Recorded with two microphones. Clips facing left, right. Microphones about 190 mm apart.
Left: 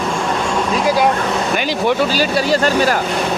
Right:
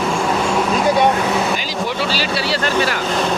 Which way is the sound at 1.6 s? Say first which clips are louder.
Left 6 dB; 60° left (ahead or behind).